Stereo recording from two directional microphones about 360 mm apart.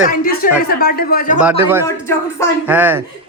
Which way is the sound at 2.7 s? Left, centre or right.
Centre.